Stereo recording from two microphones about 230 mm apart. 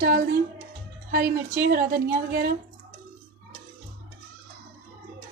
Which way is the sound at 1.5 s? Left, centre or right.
Right.